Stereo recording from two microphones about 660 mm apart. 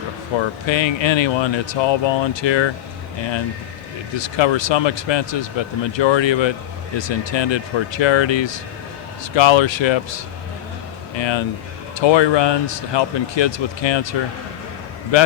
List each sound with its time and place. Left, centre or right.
0.3 s speech: left
4.1 s speech: left